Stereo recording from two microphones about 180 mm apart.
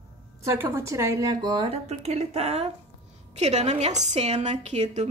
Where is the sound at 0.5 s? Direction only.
15° right (ahead or behind).